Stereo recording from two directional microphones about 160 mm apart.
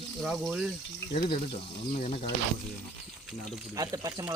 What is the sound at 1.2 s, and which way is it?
Speech, 35° left (ahead or behind).